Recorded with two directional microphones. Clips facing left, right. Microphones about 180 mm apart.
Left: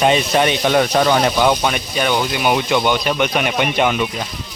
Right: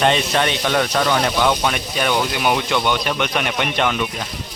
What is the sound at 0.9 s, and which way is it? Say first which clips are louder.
Speech: left 4 dB; 25° left (ahead or behind).